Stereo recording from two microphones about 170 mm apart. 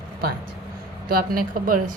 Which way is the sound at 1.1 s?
60° right (ahead or behind).